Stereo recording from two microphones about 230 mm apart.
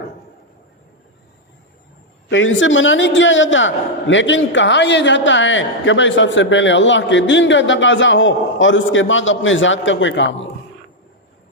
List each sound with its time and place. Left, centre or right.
2.3 s a man's voice: left